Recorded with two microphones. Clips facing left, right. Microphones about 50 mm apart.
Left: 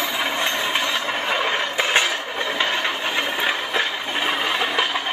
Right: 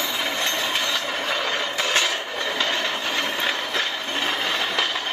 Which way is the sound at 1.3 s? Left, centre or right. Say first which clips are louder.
Left 3 dB; left.